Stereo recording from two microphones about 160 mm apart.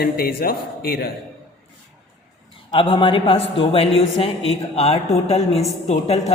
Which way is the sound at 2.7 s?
35° left (ahead or behind).